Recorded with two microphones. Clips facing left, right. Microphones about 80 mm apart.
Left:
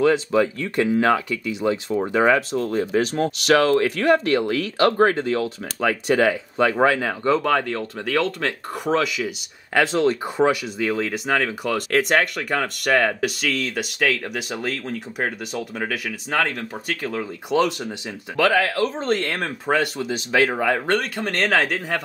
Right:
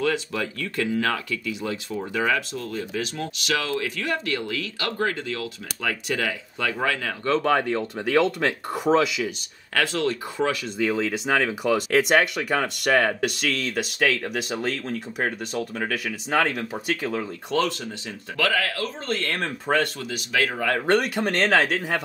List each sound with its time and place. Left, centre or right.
0.0 s speech: left
1.9 s speech: left
7.4 s speech: centre
9.8 s speech: left
10.8 s speech: centre
17.5 s speech: centre
19.3 s speech: centre
20.0 s speech: left
20.8 s speech: centre